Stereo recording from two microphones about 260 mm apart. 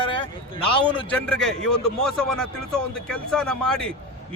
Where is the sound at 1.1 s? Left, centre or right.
Centre.